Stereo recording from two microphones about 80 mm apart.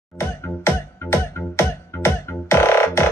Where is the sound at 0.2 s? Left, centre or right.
Left.